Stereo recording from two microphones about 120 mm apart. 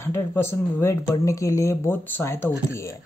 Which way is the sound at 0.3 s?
20° left (ahead or behind).